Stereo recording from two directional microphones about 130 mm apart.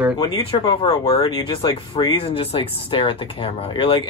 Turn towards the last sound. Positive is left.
turn(degrees=45)  # may be behind; listen again after turning